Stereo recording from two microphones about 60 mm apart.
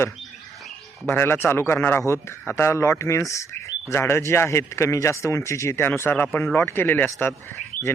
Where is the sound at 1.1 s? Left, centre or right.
Left.